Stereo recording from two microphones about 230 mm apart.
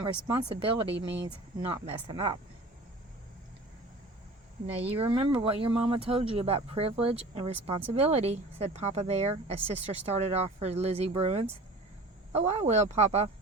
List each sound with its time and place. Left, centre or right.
0.3 s speech: right
0.9 s speech: right
1.8 s speech: right
4.6 s speech: right